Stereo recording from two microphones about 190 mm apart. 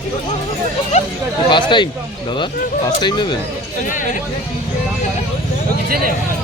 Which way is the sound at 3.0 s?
25° left (ahead or behind).